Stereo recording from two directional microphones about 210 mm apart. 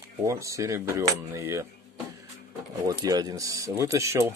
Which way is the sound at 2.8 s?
15° right (ahead or behind).